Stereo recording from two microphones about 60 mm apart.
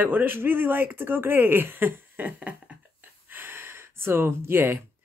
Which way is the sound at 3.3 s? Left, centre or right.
Right.